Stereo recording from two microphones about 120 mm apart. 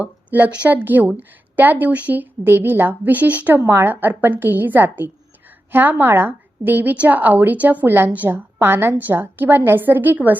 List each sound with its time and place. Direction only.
0.0 s a woman's voice: 15° right (ahead or behind)